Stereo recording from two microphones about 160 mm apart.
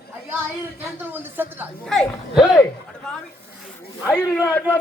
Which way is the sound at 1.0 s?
10° right (ahead or behind).